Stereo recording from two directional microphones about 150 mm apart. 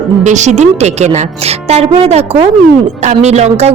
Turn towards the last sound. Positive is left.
turn(degrees=-45)  # may be behind; listen again after turning